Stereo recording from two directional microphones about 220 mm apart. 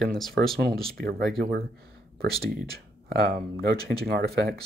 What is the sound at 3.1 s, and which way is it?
Speech, 45° right (ahead or behind).